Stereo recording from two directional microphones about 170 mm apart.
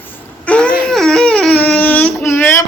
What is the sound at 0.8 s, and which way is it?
Baby cry, centre (ahead or behind).